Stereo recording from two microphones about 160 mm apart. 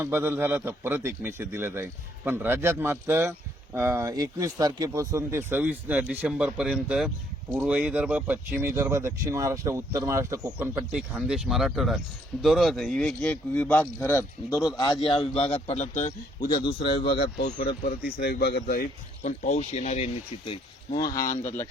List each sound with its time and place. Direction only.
0.0 s a man's voice: 15° right (ahead or behind)
10.6 s speech: 10° right (ahead or behind); by 14.6 s 15° left (ahead or behind)
15.0 s speech: 30° left (ahead or behind)
16.5 s speech: 30° left (ahead or behind)
17.2 s speech: 85° left
18.6 s speech: 60° left (ahead or behind)
19.5 s speech: 45° left (ahead or behind); by 21.7 s 20° left (ahead or behind)